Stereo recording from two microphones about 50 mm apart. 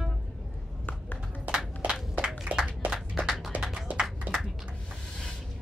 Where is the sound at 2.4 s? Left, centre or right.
Centre.